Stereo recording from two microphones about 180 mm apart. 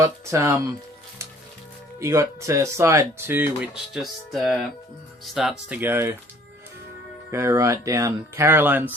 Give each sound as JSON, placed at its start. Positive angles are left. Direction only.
{"t": 0.0, "sound": "speech", "side_deg": -15}
{"t": 2.0, "sound": "speech", "side_deg": -15}
{"t": 3.9, "sound": "speech", "side_deg": 0}
{"t": 7.3, "sound": "speech", "side_deg": -15}